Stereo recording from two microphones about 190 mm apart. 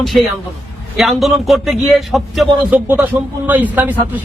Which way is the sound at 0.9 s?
Centre (ahead or behind).